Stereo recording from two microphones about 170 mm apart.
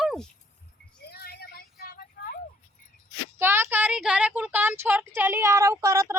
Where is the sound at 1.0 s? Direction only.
70° left (ahead or behind).